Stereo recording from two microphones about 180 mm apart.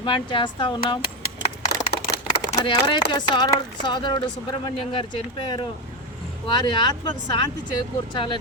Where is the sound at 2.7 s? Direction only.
25° left (ahead or behind).